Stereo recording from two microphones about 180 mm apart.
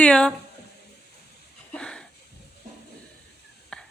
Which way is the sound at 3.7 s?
5° left (ahead or behind).